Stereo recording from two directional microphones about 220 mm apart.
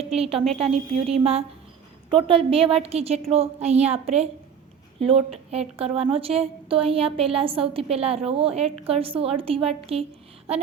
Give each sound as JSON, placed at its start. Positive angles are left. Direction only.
{"t": 0.1, "sound": "a woman's voice", "side_deg": -25}